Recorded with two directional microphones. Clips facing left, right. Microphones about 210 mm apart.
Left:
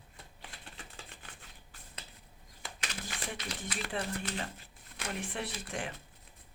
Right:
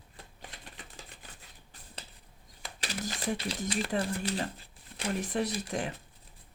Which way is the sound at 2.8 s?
35° right (ahead or behind).